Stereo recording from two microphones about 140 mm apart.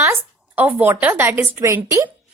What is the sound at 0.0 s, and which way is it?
A woman's voice, 15° right (ahead or behind).